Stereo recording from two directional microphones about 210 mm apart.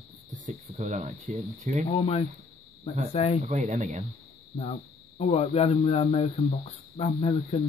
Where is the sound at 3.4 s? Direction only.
35° right (ahead or behind).